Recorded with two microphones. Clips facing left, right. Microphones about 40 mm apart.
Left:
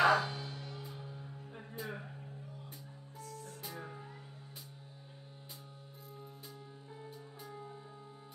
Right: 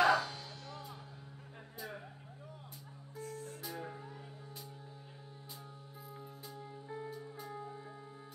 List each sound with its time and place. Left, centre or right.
0.0 s music: centre
1.8 s a sound: centre
3.6 s music: centre